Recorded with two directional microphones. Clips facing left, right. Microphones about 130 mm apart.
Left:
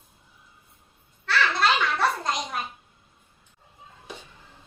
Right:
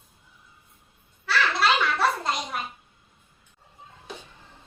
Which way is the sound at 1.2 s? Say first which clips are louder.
Even; 5° right (ahead or behind).